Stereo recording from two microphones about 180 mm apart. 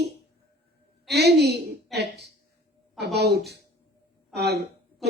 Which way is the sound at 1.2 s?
65° right (ahead or behind).